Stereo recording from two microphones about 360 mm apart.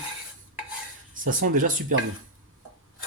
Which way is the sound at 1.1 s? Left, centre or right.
Right.